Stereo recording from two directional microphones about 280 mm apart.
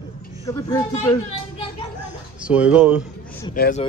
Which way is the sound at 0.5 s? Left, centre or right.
Centre.